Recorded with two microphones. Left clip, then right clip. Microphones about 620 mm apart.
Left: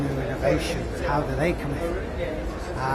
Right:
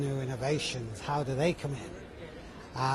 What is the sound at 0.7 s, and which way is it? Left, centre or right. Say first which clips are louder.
Speech: left 9 dB; right.